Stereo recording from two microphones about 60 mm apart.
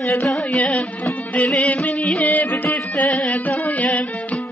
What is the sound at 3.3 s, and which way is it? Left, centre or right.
Music, left.